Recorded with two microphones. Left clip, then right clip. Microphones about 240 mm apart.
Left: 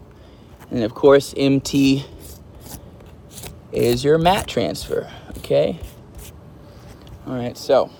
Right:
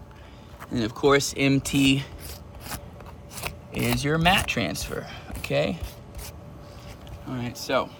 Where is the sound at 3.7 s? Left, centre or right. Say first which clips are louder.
Left 10 dB; centre.